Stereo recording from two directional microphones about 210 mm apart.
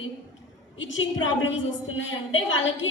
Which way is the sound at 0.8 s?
65° left (ahead or behind).